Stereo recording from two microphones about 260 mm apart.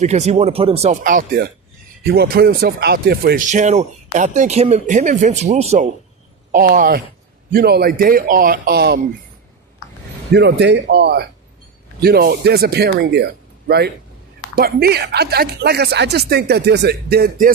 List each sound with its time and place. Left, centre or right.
0.0 s speech: right
10.3 s speech: right